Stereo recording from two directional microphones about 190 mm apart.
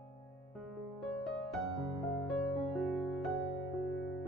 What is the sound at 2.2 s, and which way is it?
Music, centre (ahead or behind).